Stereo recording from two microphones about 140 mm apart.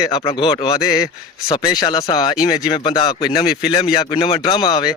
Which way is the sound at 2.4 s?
30° left (ahead or behind).